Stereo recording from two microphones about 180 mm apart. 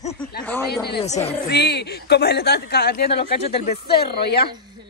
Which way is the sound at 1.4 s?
65° left (ahead or behind).